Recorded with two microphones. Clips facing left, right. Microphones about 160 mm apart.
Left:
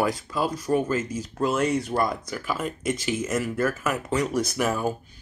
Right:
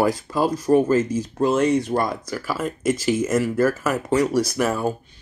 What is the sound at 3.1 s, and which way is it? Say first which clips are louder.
Speech: right 7 dB; 40° right (ahead or behind).